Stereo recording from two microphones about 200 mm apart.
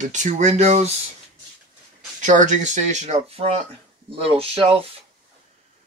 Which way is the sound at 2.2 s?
40° right (ahead or behind).